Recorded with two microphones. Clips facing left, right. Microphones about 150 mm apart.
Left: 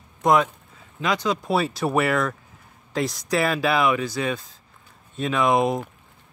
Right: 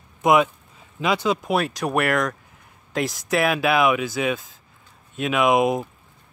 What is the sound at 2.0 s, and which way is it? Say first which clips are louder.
Speech: right 1 dB; centre (ahead or behind).